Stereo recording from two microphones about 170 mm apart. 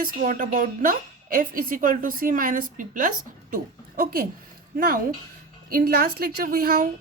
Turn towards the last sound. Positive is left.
turn(degrees=-60)  # may be behind; listen again after turning